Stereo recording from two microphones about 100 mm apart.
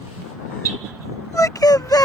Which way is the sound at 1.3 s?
35° left (ahead or behind).